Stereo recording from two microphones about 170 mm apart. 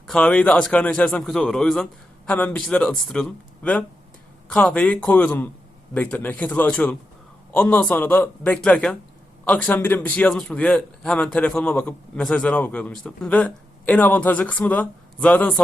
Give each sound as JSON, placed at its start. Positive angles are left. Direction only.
{"t": 0.1, "sound": "a man's voice", "side_deg": 5}